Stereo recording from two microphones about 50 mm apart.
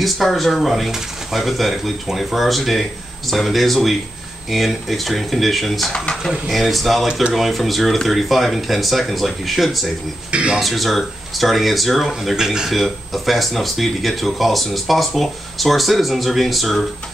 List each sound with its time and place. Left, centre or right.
0.0 s speech: centre
10.3 s speech: right
10.6 s speech: centre